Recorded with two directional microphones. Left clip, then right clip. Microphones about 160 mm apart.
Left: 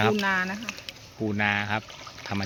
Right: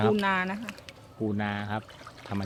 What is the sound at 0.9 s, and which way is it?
Speech, 5° left (ahead or behind).